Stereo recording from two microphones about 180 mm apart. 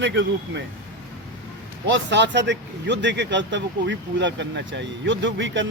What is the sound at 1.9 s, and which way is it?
Speech, 80° right.